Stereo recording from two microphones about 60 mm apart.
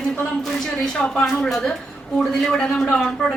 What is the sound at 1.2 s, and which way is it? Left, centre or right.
Speech, centre.